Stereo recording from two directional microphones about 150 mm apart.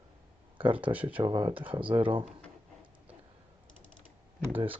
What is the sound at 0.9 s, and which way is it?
Speech, 10° right (ahead or behind).